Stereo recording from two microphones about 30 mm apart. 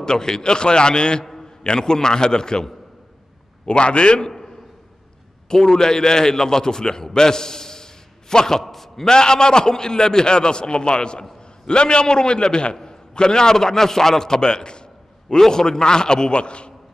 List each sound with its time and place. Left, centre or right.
0.0 s a man's voice: left
3.6 s a man's voice: left
5.5 s a man's voice: centre
8.6 s a sound: centre
9.0 s a man's voice: left
15.2 s a man's voice: centre; by 16.7 s left